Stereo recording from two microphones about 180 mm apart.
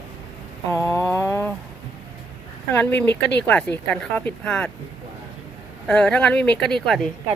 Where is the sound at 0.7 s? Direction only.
15° left (ahead or behind).